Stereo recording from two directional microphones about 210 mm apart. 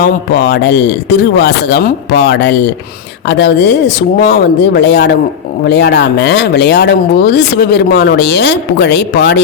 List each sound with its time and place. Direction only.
0.0 s speech: 50° left (ahead or behind)